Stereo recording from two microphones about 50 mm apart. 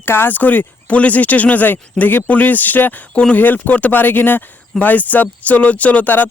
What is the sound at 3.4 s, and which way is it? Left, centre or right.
A man's voice, left.